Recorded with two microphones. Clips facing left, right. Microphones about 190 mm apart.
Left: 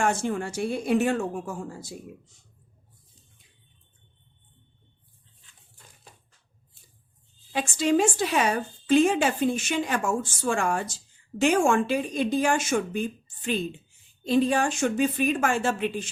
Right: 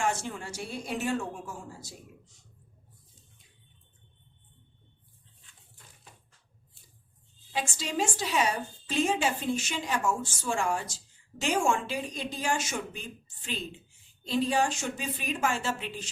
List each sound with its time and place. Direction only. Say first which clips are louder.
0.0 s a woman's voice: left 6 dB; 55° left (ahead or behind)
7.5 s a woman's voice: left 10 dB; 55° left (ahead or behind)